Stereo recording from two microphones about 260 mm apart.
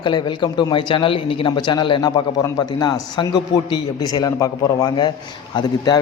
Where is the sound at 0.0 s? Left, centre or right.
Centre.